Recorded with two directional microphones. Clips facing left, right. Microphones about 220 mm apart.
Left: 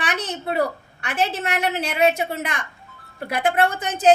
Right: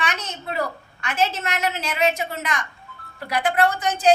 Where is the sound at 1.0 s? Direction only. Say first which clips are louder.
Even; 65° left (ahead or behind).